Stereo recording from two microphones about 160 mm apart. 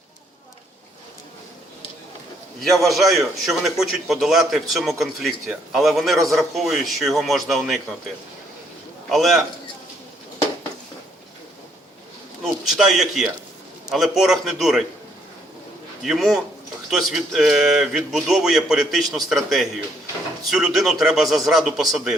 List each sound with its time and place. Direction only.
2.6 s a man's voice: centre (ahead or behind)
9.0 s a man's voice: centre (ahead or behind)
12.4 s a man's voice: centre (ahead or behind)
16.0 s a man's voice: centre (ahead or behind)